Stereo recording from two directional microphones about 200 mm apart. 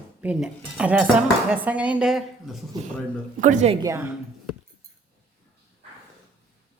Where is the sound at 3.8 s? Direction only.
15° right (ahead or behind).